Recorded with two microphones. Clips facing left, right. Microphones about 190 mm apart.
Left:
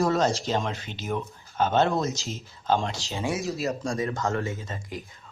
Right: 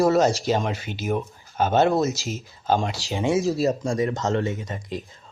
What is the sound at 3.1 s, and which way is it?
Speech, 20° right (ahead or behind).